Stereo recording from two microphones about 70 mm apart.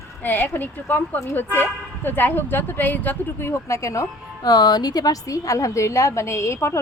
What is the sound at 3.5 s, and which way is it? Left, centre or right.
Speech, left.